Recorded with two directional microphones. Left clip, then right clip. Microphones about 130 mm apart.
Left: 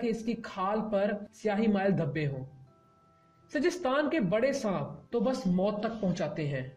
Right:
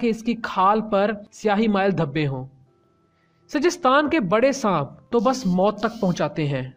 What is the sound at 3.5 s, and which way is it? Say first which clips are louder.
A woman's voice: right 10 dB; 40° right (ahead or behind).